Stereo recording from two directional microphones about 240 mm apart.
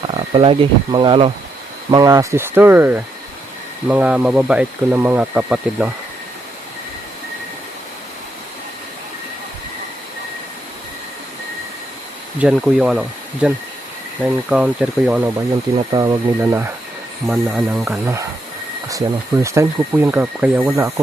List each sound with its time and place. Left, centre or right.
0.1 s speech: right; by 5.9 s centre
12.4 s speech: centre